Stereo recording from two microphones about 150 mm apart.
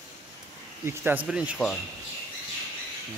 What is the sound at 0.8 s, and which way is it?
Speech, 15° right (ahead or behind).